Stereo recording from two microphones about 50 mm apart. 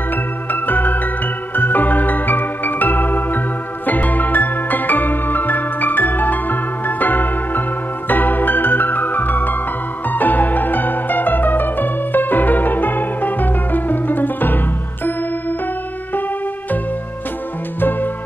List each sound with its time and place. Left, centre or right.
0.5 s music: left
17.7 s music: left